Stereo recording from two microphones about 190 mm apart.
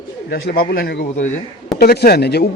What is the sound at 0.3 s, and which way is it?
Speech, 55° left (ahead or behind).